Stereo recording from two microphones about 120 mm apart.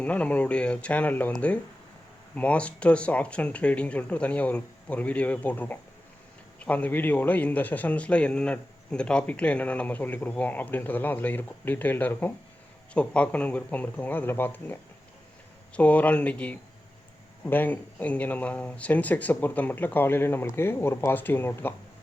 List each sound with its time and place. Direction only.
0.0 s a man's voice: 10° left (ahead or behind)